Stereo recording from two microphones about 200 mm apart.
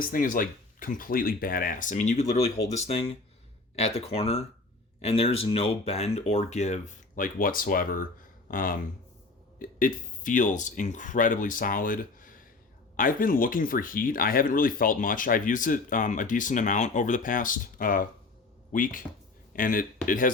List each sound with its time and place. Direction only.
0.0 s speech: 45° left (ahead or behind)